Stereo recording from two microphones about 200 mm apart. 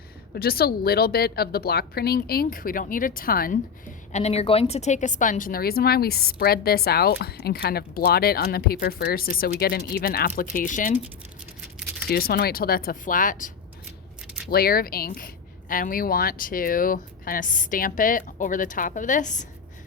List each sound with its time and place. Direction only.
0.3 s a woman's voice: 50° left (ahead or behind)
4.1 s a woman's voice: 35° left (ahead or behind)
11.6 s a sound: 5° right (ahead or behind)
12.1 s a woman's voice: 50° left (ahead or behind)
14.5 s a woman's voice: 50° left (ahead or behind)